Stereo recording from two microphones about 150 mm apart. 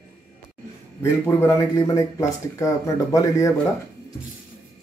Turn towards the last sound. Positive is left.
turn(degrees=20)  # may be behind; listen again after turning